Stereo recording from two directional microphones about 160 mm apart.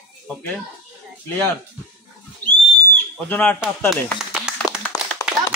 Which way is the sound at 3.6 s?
5° right (ahead or behind).